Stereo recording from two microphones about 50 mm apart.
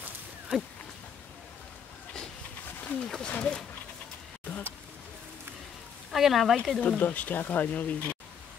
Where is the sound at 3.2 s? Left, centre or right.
Left.